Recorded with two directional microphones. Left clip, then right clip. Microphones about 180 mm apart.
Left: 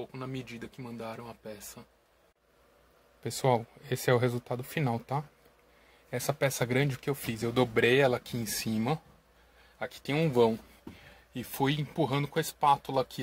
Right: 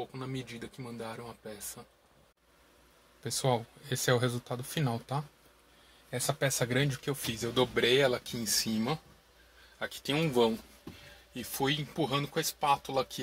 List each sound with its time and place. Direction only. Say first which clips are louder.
0.1 s speech: even; 5° left (ahead or behind)
3.3 s speech: left 3 dB; 20° left (ahead or behind)